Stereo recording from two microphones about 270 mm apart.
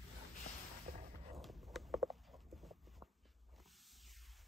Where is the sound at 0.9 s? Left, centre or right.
Right.